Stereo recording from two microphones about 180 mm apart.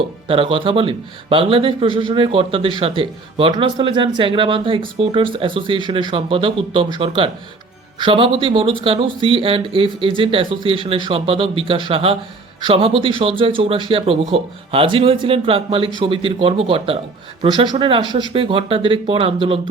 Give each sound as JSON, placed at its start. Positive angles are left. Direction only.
{"t": 0.3, "sound": "speech", "side_deg": -30}